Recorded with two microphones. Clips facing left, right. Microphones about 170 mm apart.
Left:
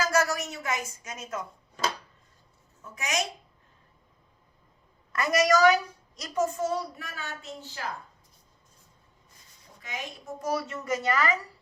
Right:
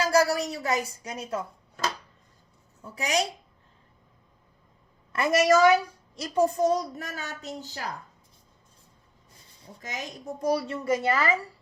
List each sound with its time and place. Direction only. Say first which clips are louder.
0.0 s a woman's voice: right 4 dB; 30° right (ahead or behind)
2.8 s a woman's voice: right 4 dB; 35° right (ahead or behind)
5.1 s a woman's voice: right 3 dB; 30° right (ahead or behind)
9.8 s a woman's voice: right 2 dB; 40° right (ahead or behind)